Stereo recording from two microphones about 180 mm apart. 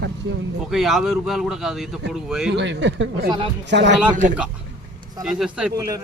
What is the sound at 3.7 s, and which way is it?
Speech, 75° right (ahead or behind).